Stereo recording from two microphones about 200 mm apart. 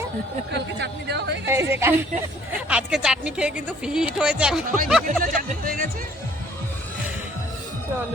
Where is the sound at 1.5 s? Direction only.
10° right (ahead or behind).